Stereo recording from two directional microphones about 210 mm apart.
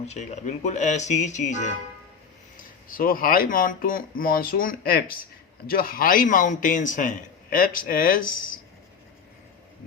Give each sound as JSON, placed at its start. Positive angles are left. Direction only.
{"t": 0.1, "sound": "a man's voice", "side_deg": 35}
{"t": 2.9, "sound": "a man's voice", "side_deg": 45}